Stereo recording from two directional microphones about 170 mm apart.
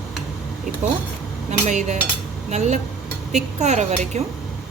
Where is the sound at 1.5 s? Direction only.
45° right (ahead or behind).